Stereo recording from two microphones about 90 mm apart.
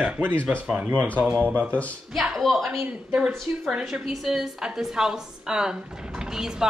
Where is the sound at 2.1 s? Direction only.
Centre (ahead or behind).